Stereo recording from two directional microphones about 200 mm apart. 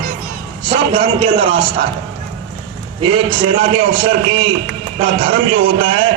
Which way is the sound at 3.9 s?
70° right (ahead or behind).